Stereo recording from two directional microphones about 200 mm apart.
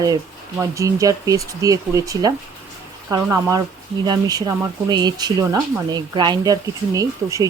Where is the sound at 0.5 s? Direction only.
15° right (ahead or behind).